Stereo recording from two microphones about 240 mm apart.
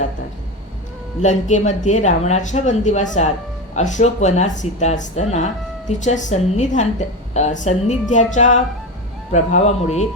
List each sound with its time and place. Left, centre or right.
1.2 s a woman's voice: left